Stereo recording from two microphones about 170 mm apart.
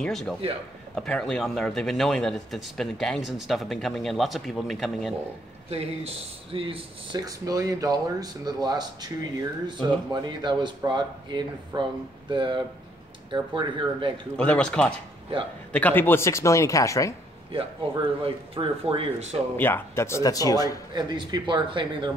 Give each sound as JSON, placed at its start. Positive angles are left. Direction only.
{"t": 0.0, "sound": "speech", "side_deg": 0}
{"t": 5.7, "sound": "speech", "side_deg": -35}
{"t": 14.3, "sound": "speech", "side_deg": 10}
{"t": 17.5, "sound": "speech", "side_deg": -30}
{"t": 19.5, "sound": "speech", "side_deg": 10}
{"t": 20.9, "sound": "speech", "side_deg": -25}